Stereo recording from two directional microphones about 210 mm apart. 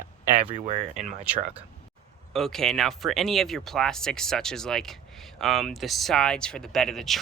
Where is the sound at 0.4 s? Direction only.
30° right (ahead or behind).